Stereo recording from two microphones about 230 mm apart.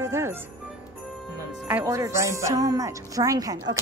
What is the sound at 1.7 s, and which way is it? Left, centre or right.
A woman's voice, centre.